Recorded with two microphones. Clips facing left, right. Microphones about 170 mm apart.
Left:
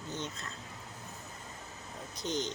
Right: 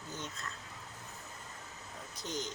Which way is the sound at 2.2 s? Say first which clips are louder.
Left 5 dB; 20° left (ahead or behind).